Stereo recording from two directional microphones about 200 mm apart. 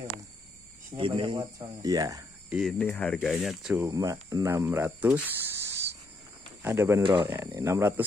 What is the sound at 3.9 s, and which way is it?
Speech, 15° right (ahead or behind).